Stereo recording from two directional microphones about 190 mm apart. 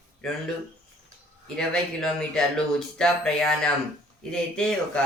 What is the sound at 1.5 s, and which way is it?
Speech, 5° left (ahead or behind).